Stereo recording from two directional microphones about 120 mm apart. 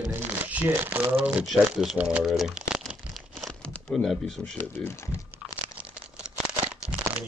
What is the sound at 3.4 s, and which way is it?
Crumpling, 5° left (ahead or behind).